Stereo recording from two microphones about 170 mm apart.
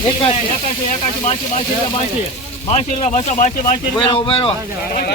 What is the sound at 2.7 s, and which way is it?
Speech, 35° left (ahead or behind).